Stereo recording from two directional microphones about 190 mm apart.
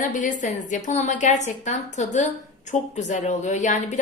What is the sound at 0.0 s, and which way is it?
A woman's voice, 40° left (ahead or behind).